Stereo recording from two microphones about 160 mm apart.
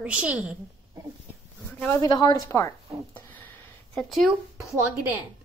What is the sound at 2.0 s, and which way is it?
Speech, 25° left (ahead or behind).